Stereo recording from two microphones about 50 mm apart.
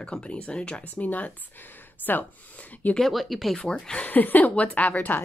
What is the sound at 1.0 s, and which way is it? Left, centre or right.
Speech, left.